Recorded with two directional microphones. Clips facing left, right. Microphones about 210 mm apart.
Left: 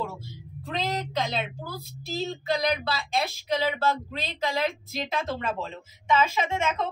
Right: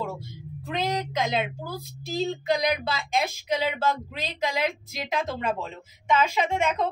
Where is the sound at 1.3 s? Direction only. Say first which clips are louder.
Right 4 dB; 15° right (ahead or behind).